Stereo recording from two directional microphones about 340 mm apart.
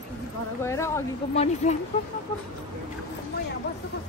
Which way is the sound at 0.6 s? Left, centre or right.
Centre.